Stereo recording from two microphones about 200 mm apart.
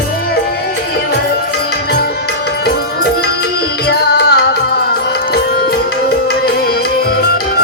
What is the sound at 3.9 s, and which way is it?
Music, 55° left (ahead or behind).